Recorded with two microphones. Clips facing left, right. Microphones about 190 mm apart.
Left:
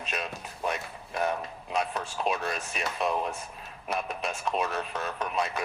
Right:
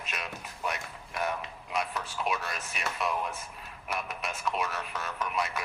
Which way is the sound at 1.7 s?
30° left (ahead or behind).